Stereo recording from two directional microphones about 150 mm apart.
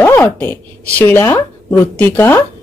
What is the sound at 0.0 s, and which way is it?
A woman's voice, 15° left (ahead or behind).